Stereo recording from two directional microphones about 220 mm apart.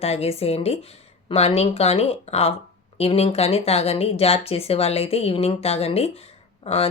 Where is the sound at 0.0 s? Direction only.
30° left (ahead or behind).